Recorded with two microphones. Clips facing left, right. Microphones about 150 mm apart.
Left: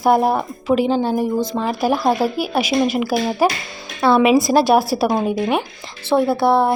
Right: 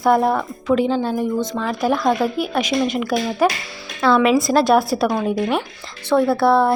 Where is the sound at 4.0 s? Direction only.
25° left (ahead or behind).